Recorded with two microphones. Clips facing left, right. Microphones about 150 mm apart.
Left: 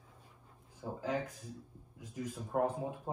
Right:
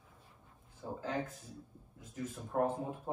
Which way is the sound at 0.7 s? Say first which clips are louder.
Left 1 dB; 15° left (ahead or behind).